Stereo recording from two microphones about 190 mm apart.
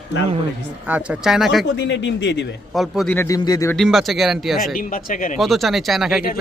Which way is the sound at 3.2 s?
20° left (ahead or behind).